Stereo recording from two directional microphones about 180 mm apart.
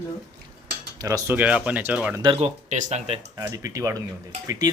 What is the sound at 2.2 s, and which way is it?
Speech, 35° right (ahead or behind).